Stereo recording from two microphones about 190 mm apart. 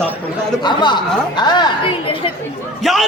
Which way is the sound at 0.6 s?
25° left (ahead or behind).